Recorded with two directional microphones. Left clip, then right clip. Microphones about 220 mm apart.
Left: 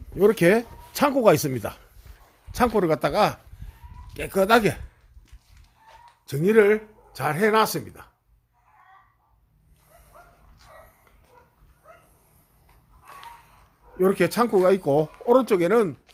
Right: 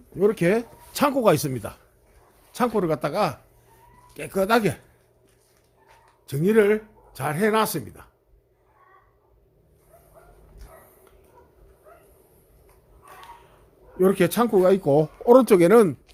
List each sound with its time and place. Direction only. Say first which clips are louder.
0.2 s speech: left 3 dB; 15° left (ahead or behind)
0.9 s speech: left 1 dB; centre (ahead or behind)
6.2 s speech: left 1 dB; centre (ahead or behind)
14.0 s speech: right 1 dB; 20° right (ahead or behind)
15.2 s speech: right 6 dB; 35° right (ahead or behind)